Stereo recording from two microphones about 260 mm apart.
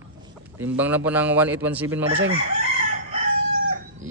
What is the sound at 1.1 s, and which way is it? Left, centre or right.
Speech, centre.